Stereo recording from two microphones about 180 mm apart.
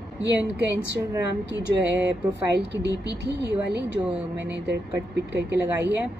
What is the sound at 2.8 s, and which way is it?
Speech, 70° right (ahead or behind).